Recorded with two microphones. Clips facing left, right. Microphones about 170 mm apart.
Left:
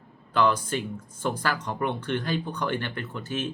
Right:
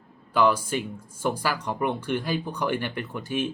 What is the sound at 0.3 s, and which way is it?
Speech, 10° right (ahead or behind).